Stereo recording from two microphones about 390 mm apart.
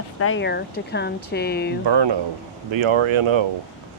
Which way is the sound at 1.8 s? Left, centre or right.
Right.